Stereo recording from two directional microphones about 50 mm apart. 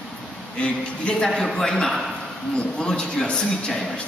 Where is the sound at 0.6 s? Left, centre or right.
Centre.